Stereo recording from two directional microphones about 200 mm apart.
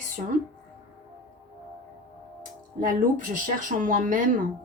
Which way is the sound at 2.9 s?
40° right (ahead or behind).